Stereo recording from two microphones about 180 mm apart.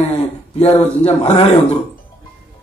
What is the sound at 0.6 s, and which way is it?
Speech, 35° left (ahead or behind).